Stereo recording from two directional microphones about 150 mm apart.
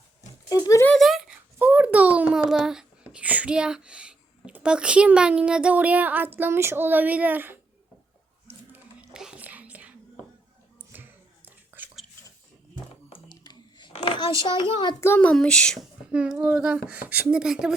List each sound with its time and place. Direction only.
0.5 s speech: 20° left (ahead or behind)
0.9 s a sound: centre (ahead or behind)
1.5 s a child's voice: 10° right (ahead or behind)
8.4 s whispering: 10° right (ahead or behind)
10.9 s a sound: 10° right (ahead or behind)
11.4 s whispering: 15° right (ahead or behind)
13.2 s whispering: 30° left (ahead or behind)
13.9 s a sound: 40° left (ahead or behind)
14.4 s a child's voice: 30° left (ahead or behind)
15.0 s speech: 10° left (ahead or behind)
16.1 s speech: 5° right (ahead or behind)